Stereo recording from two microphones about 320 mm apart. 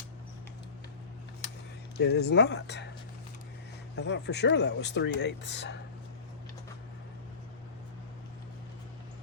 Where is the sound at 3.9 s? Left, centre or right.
Left.